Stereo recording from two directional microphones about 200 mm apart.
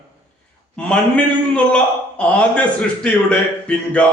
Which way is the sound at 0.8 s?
5° left (ahead or behind).